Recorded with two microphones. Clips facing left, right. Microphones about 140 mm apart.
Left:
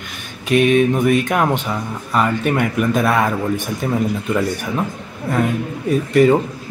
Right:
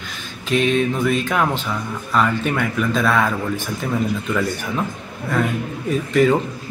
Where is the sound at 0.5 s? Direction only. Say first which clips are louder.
Left 4 dB; 55° left (ahead or behind).